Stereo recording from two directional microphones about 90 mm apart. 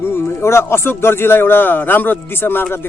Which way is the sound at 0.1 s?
30° left (ahead or behind).